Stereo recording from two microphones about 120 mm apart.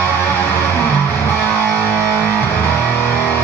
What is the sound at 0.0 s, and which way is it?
Music, 20° left (ahead or behind).